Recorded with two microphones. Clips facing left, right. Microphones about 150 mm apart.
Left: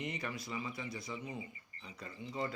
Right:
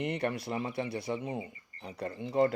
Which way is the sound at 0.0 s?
60° right (ahead or behind).